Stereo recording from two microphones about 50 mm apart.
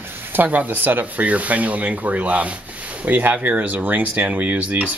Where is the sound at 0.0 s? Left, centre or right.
Right.